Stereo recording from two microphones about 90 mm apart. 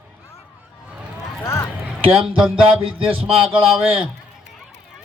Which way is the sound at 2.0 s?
80° right.